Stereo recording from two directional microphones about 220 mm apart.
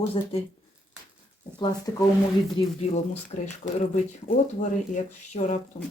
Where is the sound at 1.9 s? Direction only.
15° left (ahead or behind).